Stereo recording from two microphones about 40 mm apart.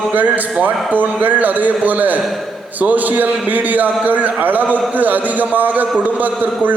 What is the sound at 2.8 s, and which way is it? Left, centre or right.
A man's voice, right.